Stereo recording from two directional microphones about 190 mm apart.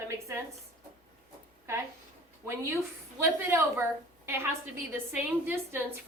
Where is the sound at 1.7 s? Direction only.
15° right (ahead or behind).